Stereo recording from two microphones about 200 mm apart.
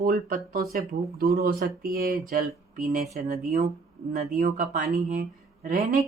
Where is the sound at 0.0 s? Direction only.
45° right (ahead or behind).